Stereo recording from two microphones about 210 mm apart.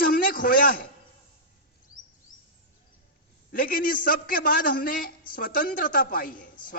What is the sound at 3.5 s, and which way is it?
A man's voice, 45° left (ahead or behind).